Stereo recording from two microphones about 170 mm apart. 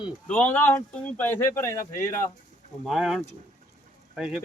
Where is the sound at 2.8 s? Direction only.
Centre (ahead or behind).